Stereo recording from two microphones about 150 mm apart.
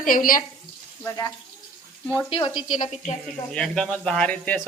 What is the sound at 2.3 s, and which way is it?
Speech, 35° left (ahead or behind).